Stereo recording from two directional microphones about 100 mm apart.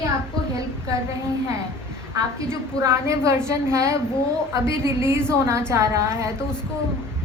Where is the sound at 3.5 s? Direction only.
30° right (ahead or behind).